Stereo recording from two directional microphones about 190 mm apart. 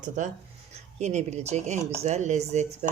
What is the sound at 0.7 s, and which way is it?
Speech, 35° right (ahead or behind).